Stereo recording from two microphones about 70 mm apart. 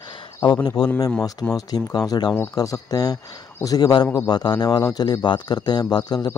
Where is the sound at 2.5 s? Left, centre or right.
Left.